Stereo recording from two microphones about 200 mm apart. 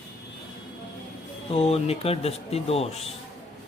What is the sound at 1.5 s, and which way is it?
Speech, 30° left (ahead or behind).